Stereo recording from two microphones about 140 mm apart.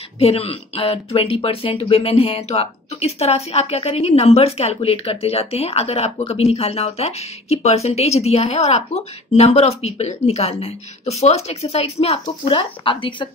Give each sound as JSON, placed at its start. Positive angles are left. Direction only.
{"t": 0.2, "sound": "speech", "side_deg": 45}